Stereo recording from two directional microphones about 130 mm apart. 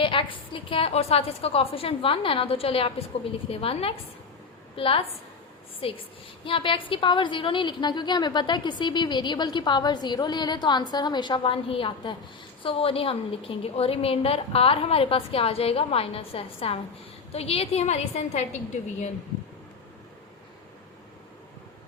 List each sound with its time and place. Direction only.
0.0 s a woman's voice: 40° left (ahead or behind); by 18.4 s 60° left (ahead or behind)